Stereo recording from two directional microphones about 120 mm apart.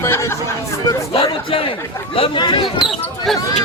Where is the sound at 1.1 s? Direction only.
50° left (ahead or behind).